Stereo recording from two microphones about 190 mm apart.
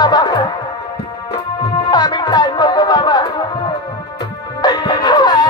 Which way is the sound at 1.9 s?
20° left (ahead or behind).